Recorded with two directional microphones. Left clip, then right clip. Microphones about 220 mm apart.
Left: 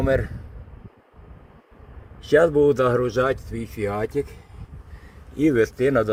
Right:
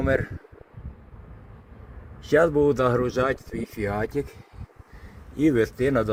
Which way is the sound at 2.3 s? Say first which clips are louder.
Left 3 dB; centre (ahead or behind).